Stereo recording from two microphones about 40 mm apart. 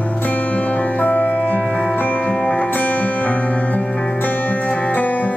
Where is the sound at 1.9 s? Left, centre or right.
Left.